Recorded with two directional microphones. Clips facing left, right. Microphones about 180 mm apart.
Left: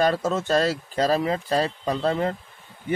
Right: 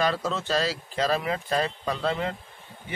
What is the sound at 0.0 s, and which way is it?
Speech, 45° left (ahead or behind).